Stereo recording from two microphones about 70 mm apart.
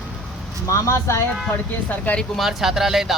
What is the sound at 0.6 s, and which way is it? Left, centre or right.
Speech, left.